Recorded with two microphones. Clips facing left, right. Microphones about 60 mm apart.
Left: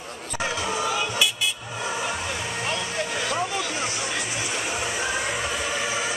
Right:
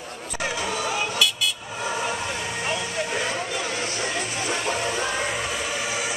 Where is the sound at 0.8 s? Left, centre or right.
Centre.